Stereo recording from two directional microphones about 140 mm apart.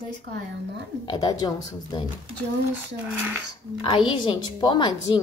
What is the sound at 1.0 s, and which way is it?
Speech, 30° left (ahead or behind).